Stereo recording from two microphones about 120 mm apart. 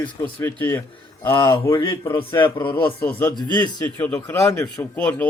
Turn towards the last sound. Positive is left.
turn(degrees=15)  # may be behind; listen again after turning